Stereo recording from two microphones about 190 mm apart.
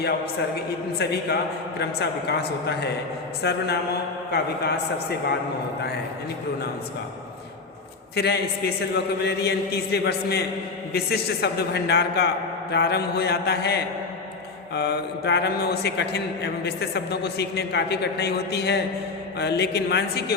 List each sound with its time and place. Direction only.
0.9 s a man's voice: 60° left (ahead or behind)
8.1 s a man's voice: 60° left (ahead or behind)